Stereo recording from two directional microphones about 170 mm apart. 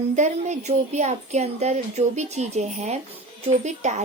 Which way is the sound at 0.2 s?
45° right (ahead or behind).